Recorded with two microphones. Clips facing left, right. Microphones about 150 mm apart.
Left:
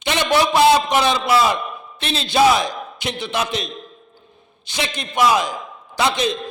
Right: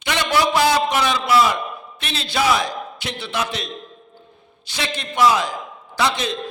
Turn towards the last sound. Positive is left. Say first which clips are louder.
# left 2 dB
turn(degrees=20)  # may be behind; listen again after turning